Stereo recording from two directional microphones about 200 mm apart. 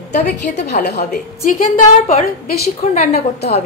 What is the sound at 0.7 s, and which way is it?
Speech, 40° left (ahead or behind).